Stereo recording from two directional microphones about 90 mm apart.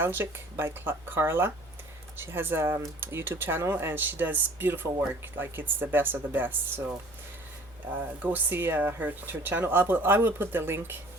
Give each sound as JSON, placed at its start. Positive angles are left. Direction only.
{"t": 0.0, "sound": "speech", "side_deg": -25}
{"t": 8.2, "sound": "speech", "side_deg": -20}